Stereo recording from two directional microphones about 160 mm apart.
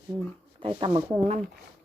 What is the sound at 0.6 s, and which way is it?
Speech, 35° right (ahead or behind).